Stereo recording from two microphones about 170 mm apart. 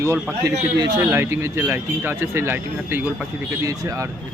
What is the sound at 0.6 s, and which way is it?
Speech, 20° right (ahead or behind).